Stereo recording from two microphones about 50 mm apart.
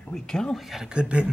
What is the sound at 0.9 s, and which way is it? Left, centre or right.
Speech, right.